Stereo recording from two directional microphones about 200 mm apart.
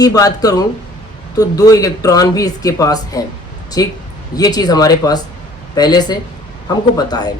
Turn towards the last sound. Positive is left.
turn(degrees=20)  # may be behind; listen again after turning